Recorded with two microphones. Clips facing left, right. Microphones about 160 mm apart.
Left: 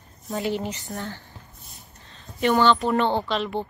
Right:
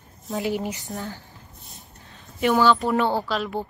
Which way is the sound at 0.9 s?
Centre (ahead or behind).